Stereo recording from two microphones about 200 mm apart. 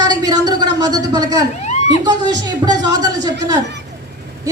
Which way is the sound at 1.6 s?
35° left (ahead or behind).